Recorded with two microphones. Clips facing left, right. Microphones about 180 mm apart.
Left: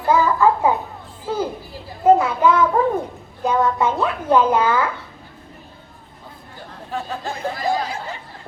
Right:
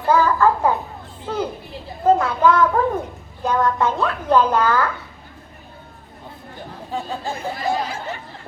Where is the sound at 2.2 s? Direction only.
10° left (ahead or behind).